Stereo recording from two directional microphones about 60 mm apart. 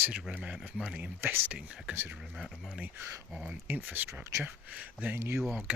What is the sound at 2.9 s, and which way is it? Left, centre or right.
Speech, right.